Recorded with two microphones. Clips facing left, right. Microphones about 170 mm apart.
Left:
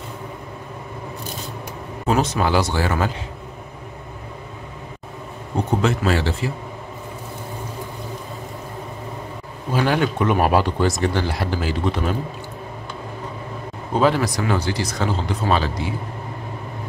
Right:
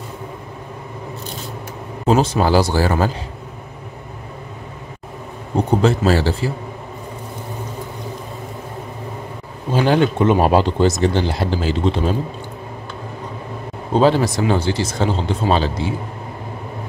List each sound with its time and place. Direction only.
2.0 s speech: 30° right (ahead or behind)
5.8 s speech: 35° right (ahead or behind)
9.7 s speech: 25° right (ahead or behind)
13.9 s speech: 30° right (ahead or behind)